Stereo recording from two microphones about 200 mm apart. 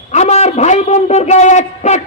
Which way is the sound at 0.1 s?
35° left (ahead or behind).